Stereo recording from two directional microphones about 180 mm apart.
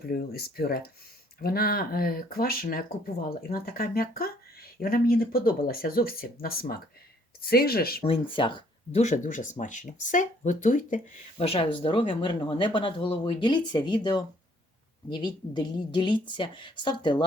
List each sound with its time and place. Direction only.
0.0 s speech: 55° left (ahead or behind)
8.0 s speech: 30° left (ahead or behind); by 11.4 s 45° left (ahead or behind)
11.4 s speech: 35° left (ahead or behind)